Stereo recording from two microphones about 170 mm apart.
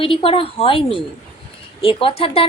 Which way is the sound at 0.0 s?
30° left (ahead or behind).